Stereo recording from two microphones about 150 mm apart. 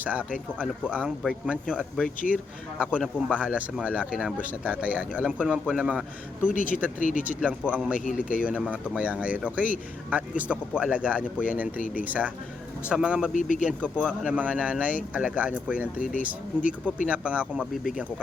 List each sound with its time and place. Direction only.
0.0 s speech: 10° right (ahead or behind)
7.0 s speech: 60° left (ahead or behind)
7.4 s speech: 5° right (ahead or behind)
8.2 s speech: 65° left (ahead or behind)
8.4 s speech: 10° right (ahead or behind)
13.3 s speech: 60° left (ahead or behind)
14.0 s speech: 10° right (ahead or behind)